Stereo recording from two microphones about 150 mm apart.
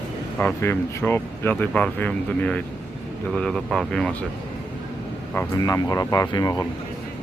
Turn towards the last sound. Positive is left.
turn(degrees=25)  # may be behind; listen again after turning